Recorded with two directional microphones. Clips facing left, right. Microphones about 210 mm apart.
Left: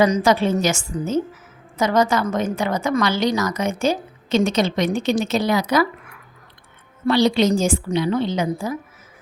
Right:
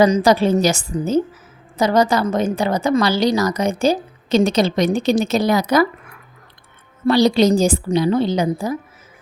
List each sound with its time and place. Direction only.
0.0 s a woman's voice: 35° right (ahead or behind)
7.1 s a woman's voice: 40° right (ahead or behind)